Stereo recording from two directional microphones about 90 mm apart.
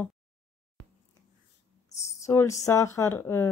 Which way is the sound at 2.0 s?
30° left (ahead or behind).